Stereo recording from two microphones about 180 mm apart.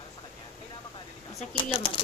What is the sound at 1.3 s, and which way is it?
Speech, 30° left (ahead or behind).